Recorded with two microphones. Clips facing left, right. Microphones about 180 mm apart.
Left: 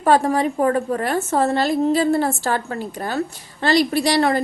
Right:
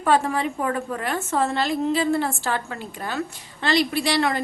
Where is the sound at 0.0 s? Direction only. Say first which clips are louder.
Left 4 dB; 40° left (ahead or behind).